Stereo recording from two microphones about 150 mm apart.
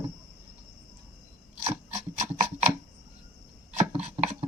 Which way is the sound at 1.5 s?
50° right (ahead or behind).